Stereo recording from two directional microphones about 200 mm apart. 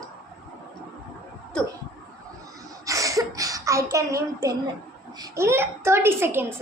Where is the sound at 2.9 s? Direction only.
15° right (ahead or behind).